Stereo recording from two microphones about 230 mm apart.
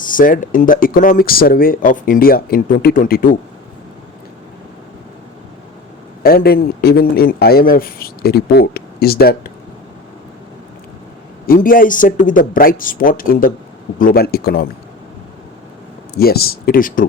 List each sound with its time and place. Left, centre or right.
0.0 s speech: left
6.2 s speech: left
11.4 s speech: left
16.1 s speech: left